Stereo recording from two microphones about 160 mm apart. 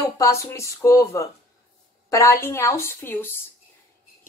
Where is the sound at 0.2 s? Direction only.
20° left (ahead or behind).